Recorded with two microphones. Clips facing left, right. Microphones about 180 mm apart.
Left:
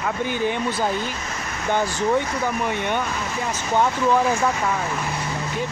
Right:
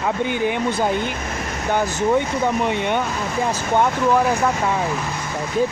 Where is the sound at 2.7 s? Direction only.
20° right (ahead or behind).